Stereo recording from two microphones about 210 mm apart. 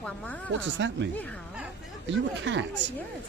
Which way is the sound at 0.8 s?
60° right (ahead or behind).